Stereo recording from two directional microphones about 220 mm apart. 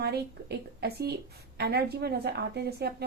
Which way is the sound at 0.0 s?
45° right (ahead or behind).